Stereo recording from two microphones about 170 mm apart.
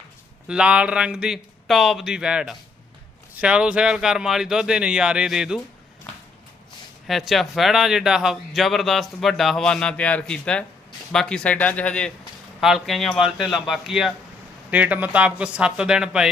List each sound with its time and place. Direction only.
0.4 s speech: 5° right (ahead or behind)
7.1 s speech: centre (ahead or behind)